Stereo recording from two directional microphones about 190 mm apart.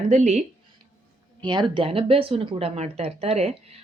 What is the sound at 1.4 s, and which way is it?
Speech, 20° right (ahead or behind).